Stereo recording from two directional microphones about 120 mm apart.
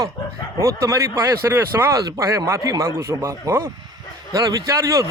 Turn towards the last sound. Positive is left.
turn(degrees=-25)  # may be behind; listen again after turning